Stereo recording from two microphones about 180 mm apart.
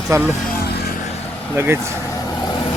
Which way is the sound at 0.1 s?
10° right (ahead or behind).